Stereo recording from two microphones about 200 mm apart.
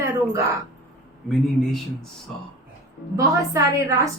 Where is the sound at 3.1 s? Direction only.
15° right (ahead or behind).